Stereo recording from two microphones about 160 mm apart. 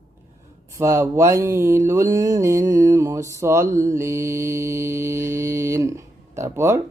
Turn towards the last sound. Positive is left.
turn(degrees=-15)  # may be behind; listen again after turning